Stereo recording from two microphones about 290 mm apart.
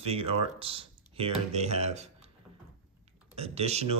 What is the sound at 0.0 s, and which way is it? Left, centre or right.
Speech, centre.